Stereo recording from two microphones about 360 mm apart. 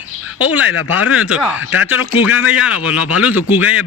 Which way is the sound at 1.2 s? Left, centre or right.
Centre.